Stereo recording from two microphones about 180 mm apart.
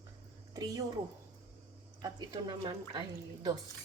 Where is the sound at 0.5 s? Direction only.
20° right (ahead or behind).